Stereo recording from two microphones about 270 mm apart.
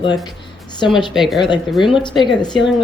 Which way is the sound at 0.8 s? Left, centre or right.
Centre.